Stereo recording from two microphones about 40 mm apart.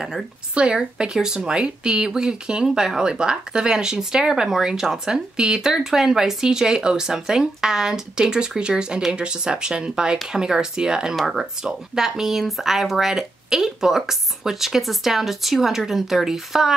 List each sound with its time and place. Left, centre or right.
0.6 s speech: right
11.1 s speech: centre
11.6 s speech: centre